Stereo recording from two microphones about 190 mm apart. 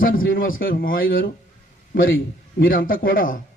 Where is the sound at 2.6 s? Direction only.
50° left (ahead or behind).